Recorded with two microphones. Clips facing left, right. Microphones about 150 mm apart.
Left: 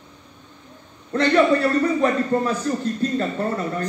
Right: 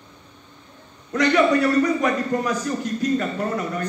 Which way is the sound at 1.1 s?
30° left (ahead or behind).